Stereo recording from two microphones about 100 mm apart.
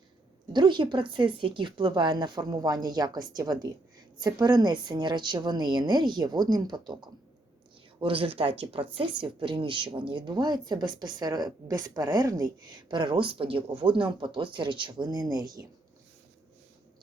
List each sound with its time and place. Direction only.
0.5 s speech: 50° right (ahead or behind)
8.0 s speech: 65° right (ahead or behind); by 15.6 s 40° right (ahead or behind)